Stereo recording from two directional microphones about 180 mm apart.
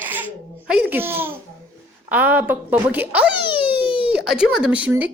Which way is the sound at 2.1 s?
10° right (ahead or behind).